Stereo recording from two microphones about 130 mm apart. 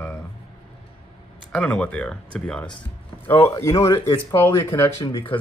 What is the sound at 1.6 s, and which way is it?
Speech, 10° left (ahead or behind).